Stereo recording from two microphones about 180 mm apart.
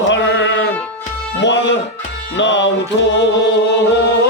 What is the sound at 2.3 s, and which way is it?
Music, 90° left.